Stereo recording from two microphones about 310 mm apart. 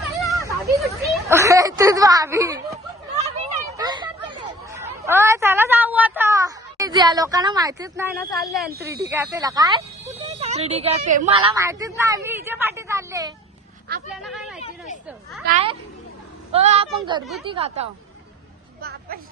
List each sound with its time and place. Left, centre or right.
0.4 s children playing: centre
1.0 s a sound: centre
3.2 s a woman's voice: centre
15.4 s a woman's voice: right
18.8 s a woman's voice: right